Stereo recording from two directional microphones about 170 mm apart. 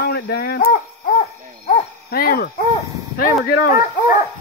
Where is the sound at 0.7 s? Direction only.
60° left (ahead or behind).